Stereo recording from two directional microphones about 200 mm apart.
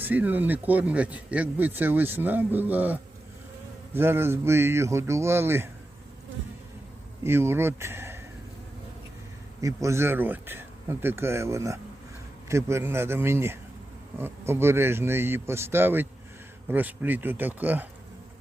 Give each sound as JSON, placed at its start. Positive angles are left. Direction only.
{"t": 0.0, "sound": "speech", "side_deg": -10}
{"t": 7.3, "sound": "speech", "side_deg": -10}
{"t": 9.6, "sound": "speech", "side_deg": -15}